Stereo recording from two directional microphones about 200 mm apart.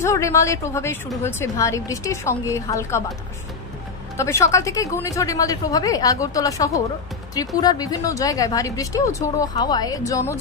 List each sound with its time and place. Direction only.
0.0 s a woman's voice: 15° left (ahead or behind)
4.2 s a woman's voice: 15° left (ahead or behind)